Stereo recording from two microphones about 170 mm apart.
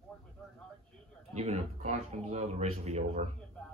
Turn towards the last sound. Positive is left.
turn(degrees=-40)  # may be behind; listen again after turning